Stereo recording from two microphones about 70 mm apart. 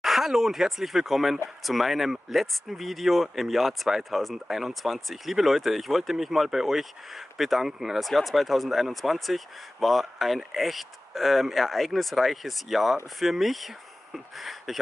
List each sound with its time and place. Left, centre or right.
0.0 s speech: centre